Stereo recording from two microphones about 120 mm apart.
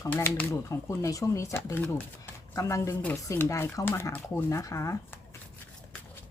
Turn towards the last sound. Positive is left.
turn(degrees=25)  # may be behind; listen again after turning